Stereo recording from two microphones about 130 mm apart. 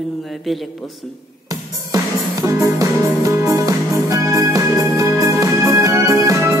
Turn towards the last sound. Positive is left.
turn(degrees=-20)  # may be behind; listen again after turning